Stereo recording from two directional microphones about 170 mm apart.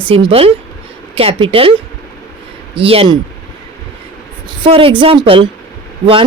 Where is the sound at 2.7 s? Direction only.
35° right (ahead or behind).